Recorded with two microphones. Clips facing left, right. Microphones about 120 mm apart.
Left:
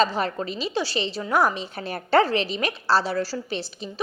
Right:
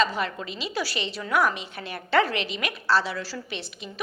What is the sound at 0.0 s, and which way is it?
A woman's voice, 35° left (ahead or behind).